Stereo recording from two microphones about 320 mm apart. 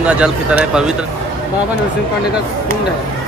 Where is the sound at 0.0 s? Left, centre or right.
Centre.